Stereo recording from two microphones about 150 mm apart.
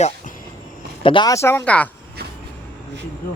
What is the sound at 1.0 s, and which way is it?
Speech, 30° left (ahead or behind).